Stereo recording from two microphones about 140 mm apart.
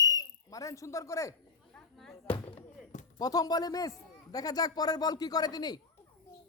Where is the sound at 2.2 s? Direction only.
35° left (ahead or behind).